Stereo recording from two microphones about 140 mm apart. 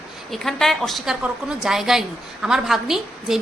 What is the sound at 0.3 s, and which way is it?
A woman's voice, 5° left (ahead or behind).